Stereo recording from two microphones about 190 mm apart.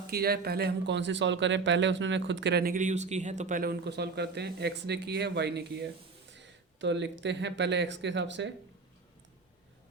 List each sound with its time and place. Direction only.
0.1 s speech: 55° right (ahead or behind)